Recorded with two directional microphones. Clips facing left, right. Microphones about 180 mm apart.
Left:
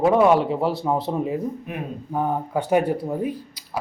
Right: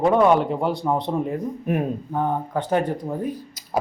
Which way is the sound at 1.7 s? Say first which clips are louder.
Right 8 dB; 45° right (ahead or behind).